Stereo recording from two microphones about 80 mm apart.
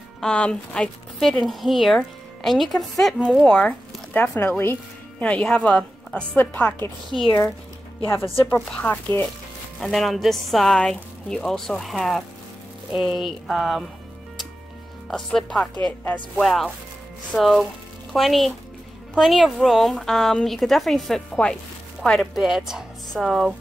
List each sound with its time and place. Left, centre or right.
0.2 s speech: centre
1.4 s a woman's voice: centre; by 4.7 s left
5.2 s speech: centre
6.3 s speech: left
8.1 s speech: left
9.8 s a woman's voice: centre
15.0 s a woman's voice: centre
22.4 s a woman's voice: centre